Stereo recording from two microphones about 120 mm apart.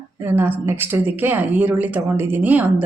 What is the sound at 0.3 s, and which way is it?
A woman's voice, 15° right (ahead or behind).